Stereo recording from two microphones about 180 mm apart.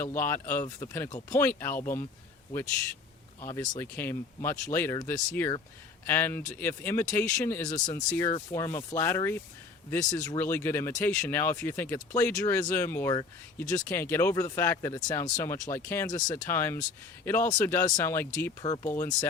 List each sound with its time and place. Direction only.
0.0 s speech: 15° left (ahead or behind)
3.4 s speech: 15° left (ahead or behind)